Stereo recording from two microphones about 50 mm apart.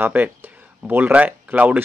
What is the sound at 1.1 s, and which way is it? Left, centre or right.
Speech, right.